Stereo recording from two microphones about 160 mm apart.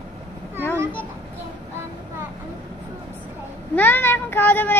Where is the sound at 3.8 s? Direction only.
10° left (ahead or behind).